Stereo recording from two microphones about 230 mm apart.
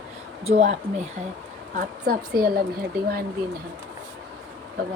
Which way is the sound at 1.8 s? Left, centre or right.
Right.